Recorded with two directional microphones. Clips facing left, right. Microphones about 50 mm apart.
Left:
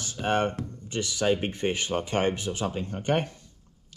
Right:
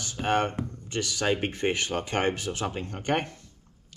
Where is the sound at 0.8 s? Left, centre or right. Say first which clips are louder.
Left 2 dB; right.